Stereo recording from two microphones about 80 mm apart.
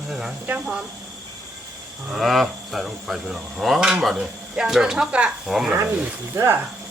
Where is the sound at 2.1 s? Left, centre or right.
Centre.